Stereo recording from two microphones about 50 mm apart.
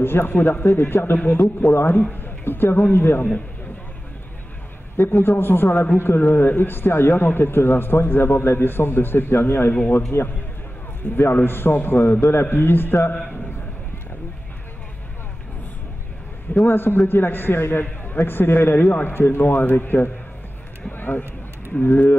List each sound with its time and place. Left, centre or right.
0.0 s a man's voice: left
0.7 s a man's voice: left
1.7 s a man's voice: left
2.2 s a sound: left
2.9 s a man's voice: left
4.9 s a man's voice: left
10.1 s a man's voice: left
11.0 s a man's voice: left
12.2 s a man's voice: left
16.6 s a man's voice: left
20.9 s a sound: left
21.8 s speech: left